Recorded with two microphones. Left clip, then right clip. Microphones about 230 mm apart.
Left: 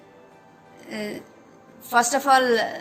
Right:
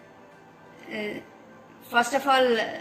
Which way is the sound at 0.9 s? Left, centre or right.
Left.